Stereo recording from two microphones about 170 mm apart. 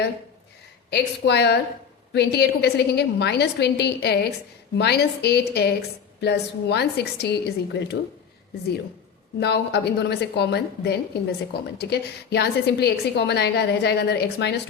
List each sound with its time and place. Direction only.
0.9 s a woman's voice: 80° left
9.4 s a woman's voice: 75° left (ahead or behind)